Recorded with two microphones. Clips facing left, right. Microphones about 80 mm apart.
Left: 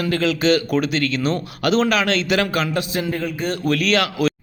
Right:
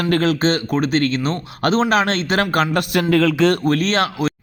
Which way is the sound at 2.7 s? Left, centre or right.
Right.